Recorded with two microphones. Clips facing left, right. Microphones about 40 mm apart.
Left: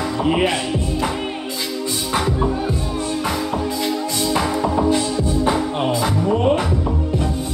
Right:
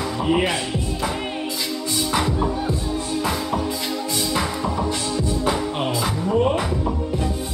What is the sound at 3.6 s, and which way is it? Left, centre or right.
Music, left.